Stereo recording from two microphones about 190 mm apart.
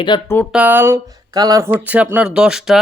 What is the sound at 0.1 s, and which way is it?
Speech, 25° left (ahead or behind).